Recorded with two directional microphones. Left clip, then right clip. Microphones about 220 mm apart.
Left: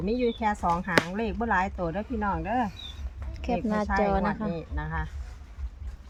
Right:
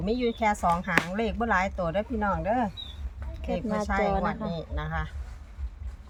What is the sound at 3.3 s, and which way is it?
A woman's voice, 25° left (ahead or behind).